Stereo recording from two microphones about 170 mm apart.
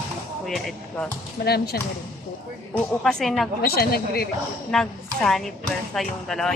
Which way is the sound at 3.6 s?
65° left (ahead or behind).